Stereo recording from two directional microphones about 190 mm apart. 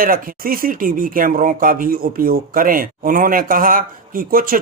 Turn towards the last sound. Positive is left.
turn(degrees=-50)  # may be behind; listen again after turning